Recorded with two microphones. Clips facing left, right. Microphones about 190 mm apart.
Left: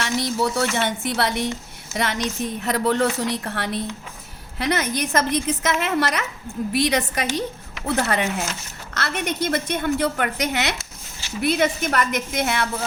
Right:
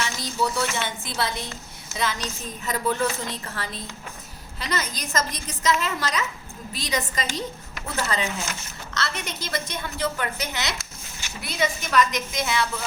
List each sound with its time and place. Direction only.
0.0 s a woman's voice: 65° left (ahead or behind)